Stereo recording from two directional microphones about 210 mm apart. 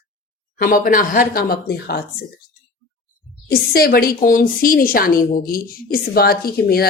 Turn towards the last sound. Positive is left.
turn(degrees=45)  # may be behind; listen again after turning